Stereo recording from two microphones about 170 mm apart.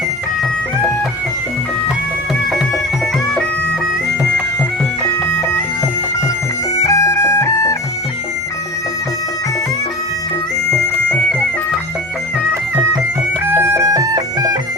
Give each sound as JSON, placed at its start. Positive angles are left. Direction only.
{"t": 6.7, "sound": "music", "side_deg": 20}
{"t": 10.7, "sound": "bagpipes", "side_deg": 10}
{"t": 13.4, "sound": "bagpipes", "side_deg": -15}